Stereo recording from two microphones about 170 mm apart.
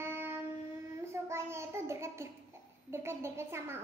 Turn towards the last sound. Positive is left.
turn(degrees=-15)  # may be behind; listen again after turning